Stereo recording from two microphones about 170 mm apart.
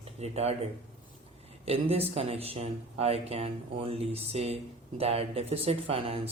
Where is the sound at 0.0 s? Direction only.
40° right (ahead or behind).